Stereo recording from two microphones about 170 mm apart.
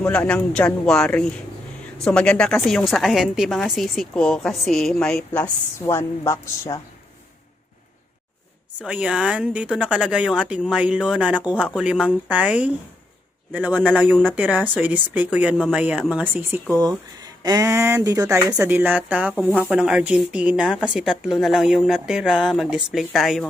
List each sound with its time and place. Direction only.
0.0 s a woman's voice: 5° left (ahead or behind)
8.8 s a woman's voice: 5° right (ahead or behind)
17.2 s a woman's voice: 20° right (ahead or behind); by 23.5 s centre (ahead or behind)